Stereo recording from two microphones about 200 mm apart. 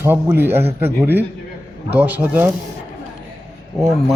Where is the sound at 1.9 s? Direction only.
10° right (ahead or behind).